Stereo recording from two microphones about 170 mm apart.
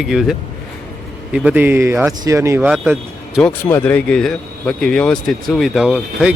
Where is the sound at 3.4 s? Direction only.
10° left (ahead or behind).